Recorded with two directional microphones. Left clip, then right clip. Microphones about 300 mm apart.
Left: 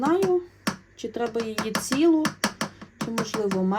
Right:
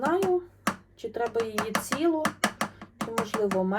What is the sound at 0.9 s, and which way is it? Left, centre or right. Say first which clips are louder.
Computer keyboard: left 2 dB; left.